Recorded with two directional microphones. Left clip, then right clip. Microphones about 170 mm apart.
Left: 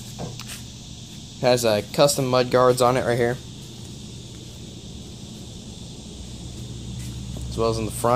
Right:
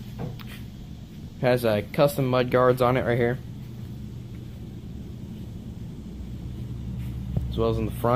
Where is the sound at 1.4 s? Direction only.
20° left (ahead or behind).